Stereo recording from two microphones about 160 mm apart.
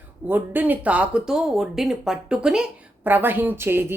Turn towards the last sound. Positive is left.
turn(degrees=-15)  # may be behind; listen again after turning